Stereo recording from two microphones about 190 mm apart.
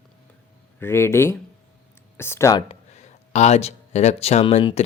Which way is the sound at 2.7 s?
35° left (ahead or behind).